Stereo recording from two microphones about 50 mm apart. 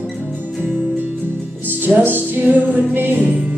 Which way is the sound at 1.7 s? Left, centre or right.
Right.